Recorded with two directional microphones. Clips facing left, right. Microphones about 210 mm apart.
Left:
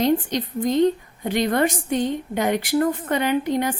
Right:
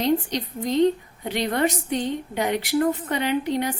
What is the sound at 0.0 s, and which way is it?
Speech, 50° left (ahead or behind).